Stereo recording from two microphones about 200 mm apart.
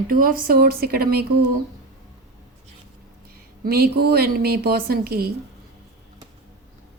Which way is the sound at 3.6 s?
50° right (ahead or behind).